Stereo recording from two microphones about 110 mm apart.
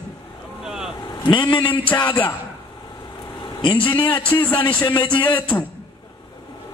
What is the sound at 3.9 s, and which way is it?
Speech, 45° left (ahead or behind).